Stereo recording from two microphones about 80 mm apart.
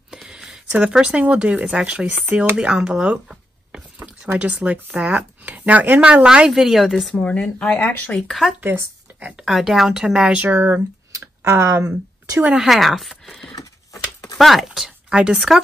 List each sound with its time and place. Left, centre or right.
0.1 s a sound: centre
0.7 s speech: centre
7.1 s speech: centre
8.3 s speech: centre
8.5 s speech: right
9.4 s speech: centre
10.5 s speech: right
11.1 s speech: right
12.5 s speech: centre
13.9 s a sound: left
14.4 s speech: centre